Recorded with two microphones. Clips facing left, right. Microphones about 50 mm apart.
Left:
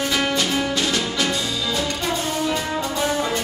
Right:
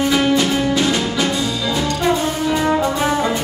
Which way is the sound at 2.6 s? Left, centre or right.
Right.